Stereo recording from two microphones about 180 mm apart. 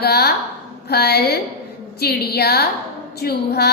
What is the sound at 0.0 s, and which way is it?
A woman's voice, 60° left (ahead or behind).